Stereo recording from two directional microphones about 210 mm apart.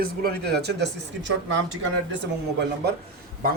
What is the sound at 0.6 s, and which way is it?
A man's voice, 55° right (ahead or behind).